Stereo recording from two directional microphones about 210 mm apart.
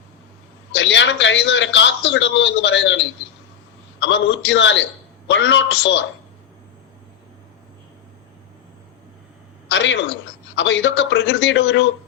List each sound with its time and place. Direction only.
0.7 s a man's voice: 60° left (ahead or behind)
9.6 s a man's voice: 60° left (ahead or behind)